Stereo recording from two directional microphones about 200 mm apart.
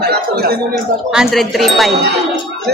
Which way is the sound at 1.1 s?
Centre (ahead or behind).